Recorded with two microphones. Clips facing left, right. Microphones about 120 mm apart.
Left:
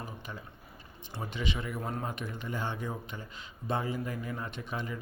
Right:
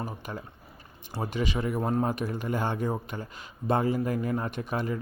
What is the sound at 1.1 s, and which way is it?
A man's voice, 45° right (ahead or behind).